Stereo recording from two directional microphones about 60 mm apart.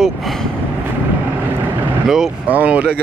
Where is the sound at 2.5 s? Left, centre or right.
Right.